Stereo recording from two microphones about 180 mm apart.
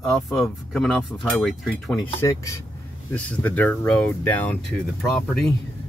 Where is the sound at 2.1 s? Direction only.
15° left (ahead or behind).